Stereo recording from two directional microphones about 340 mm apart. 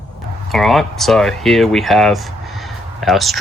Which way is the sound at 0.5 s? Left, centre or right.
Centre.